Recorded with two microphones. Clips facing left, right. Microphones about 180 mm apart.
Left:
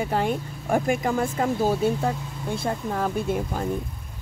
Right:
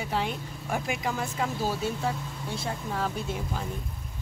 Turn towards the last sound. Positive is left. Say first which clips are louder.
# left 7 dB
turn(degrees=50)  # may be behind; listen again after turning